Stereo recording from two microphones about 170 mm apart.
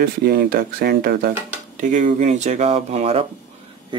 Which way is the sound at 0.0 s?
70° right (ahead or behind).